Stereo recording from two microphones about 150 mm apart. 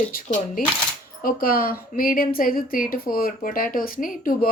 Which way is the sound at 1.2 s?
75° left (ahead or behind).